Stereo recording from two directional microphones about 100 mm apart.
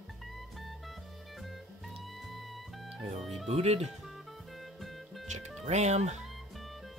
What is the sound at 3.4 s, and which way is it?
Speech, 90° right.